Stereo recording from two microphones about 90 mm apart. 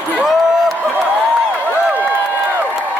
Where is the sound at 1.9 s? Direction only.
15° right (ahead or behind).